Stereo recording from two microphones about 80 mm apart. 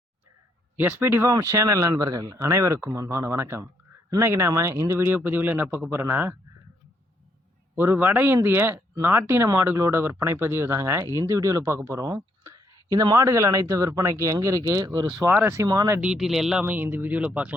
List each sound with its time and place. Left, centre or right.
0.8 s speech: right
1.4 s speech: right
5.1 s speech: right
7.8 s speech: right
13.1 s speech: right
15.3 s speech: right
15.6 s speech: right
16.0 s speech: centre
16.6 s speech: right